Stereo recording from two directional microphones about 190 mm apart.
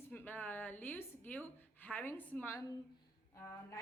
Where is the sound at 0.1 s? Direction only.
10° left (ahead or behind).